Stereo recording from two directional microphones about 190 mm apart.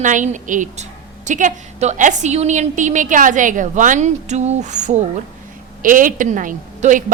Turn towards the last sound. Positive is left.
turn(degrees=-40)  # may be behind; listen again after turning